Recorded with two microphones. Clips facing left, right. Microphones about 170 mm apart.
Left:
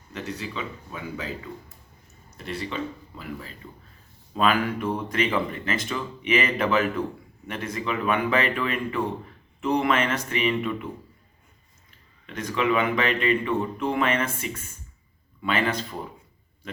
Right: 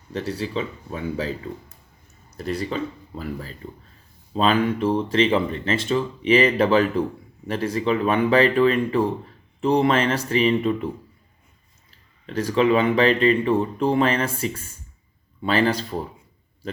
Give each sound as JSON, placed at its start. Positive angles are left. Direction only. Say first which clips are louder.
{"t": 0.1, "sound": "speech", "louder": "right 7 dB", "side_deg": -35}
{"t": 2.4, "sound": "speech", "louder": "right 5 dB", "side_deg": -40}
{"t": 4.4, "sound": "speech", "louder": "right 3 dB", "side_deg": -25}
{"t": 12.2, "sound": "speech", "louder": "right 6 dB", "side_deg": -30}